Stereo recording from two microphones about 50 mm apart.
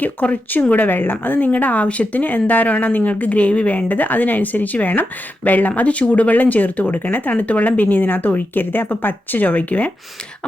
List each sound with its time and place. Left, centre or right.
0.0 s speech: left